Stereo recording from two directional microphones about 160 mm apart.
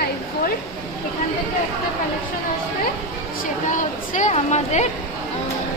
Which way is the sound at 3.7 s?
50° left (ahead or behind).